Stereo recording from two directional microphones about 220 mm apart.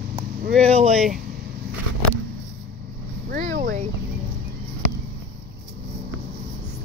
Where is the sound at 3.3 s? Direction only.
35° right (ahead or behind).